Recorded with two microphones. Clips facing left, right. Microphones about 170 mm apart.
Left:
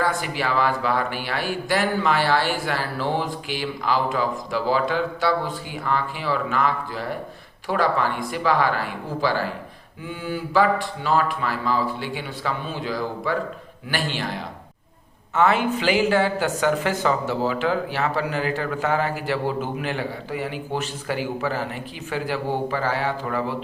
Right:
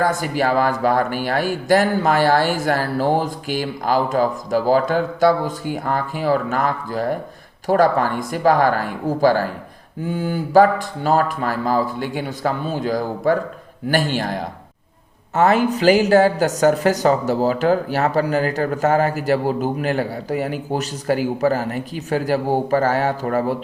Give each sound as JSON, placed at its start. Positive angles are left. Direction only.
{"t": 0.0, "sound": "speech", "side_deg": -45}